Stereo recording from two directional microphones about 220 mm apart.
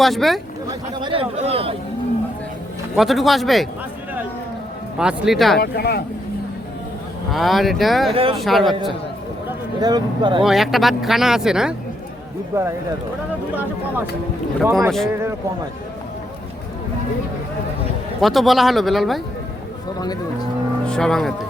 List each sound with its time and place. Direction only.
0.0 s speech: centre (ahead or behind)
0.7 s speech: 25° right (ahead or behind)
2.9 s speech: centre (ahead or behind)
4.9 s speech: 5° right (ahead or behind)
5.5 s speech: 45° left (ahead or behind)
7.3 s speech: centre (ahead or behind)
8.1 s speech: 25° right (ahead or behind)
8.4 s speech: centre (ahead or behind)
9.8 s speech: 20° right (ahead or behind)
10.4 s speech: centre (ahead or behind)
18.2 s speech: centre (ahead or behind)
20.8 s speech: 5° left (ahead or behind)